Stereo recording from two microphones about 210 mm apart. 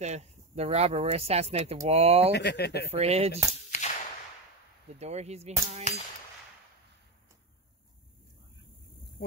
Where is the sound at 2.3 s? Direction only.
50° left (ahead or behind).